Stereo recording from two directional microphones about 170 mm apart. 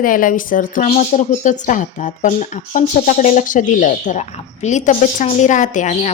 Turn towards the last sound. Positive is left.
turn(degrees=45)  # may be behind; listen again after turning